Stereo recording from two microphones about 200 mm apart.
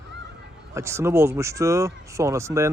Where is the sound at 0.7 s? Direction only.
15° right (ahead or behind).